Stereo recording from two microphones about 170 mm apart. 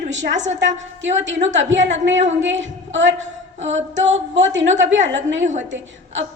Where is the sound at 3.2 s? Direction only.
45° right (ahead or behind).